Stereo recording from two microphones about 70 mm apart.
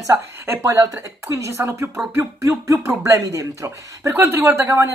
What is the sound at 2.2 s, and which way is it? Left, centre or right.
Speech, right.